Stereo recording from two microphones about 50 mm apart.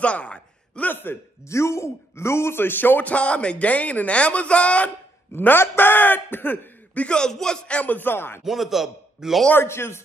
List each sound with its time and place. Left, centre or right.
0.0 s a sound: left
1.5 s speech: left
3.1 s speech: left
5.3 s a man's voice: left
7.0 s a man's voice: centre
7.6 s speech: left
7.9 s speech: left
8.5 s a man's voice: centre
9.5 s speech: left